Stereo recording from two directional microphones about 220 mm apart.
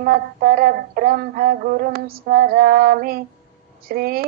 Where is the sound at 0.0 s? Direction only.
45° right (ahead or behind).